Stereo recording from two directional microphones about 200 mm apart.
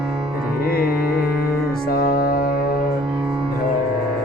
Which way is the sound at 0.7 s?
50° left (ahead or behind).